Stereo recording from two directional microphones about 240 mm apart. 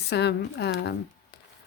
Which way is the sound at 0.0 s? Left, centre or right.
Left.